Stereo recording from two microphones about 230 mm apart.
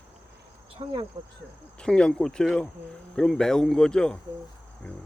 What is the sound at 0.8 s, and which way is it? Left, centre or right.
Speech, right.